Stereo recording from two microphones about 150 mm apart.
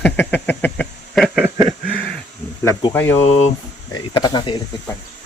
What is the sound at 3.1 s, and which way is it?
Speech, 45° left (ahead or behind).